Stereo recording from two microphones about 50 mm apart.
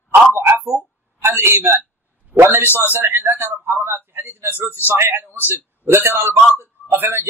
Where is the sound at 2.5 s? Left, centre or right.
Right.